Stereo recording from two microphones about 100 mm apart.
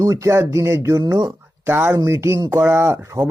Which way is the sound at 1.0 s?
40° right (ahead or behind).